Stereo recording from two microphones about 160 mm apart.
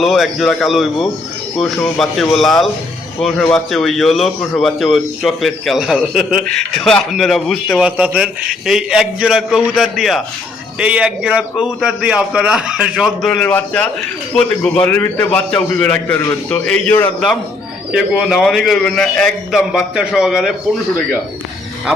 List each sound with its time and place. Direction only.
0.0 s a man's voice: centre (ahead or behind)
7.9 s a man's voice: 10° right (ahead or behind); by 17.1 s 10° left (ahead or behind)
17.9 s a man's voice: 5° right (ahead or behind)